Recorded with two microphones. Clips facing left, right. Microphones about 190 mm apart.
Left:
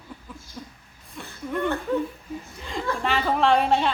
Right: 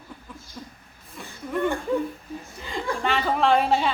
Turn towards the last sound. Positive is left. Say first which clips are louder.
# even
turn(degrees=0)  # may be behind; listen again after turning